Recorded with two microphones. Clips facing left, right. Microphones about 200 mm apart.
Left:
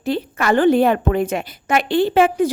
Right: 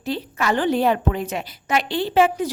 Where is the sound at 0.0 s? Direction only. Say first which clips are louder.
Left 4 dB; 55° left (ahead or behind).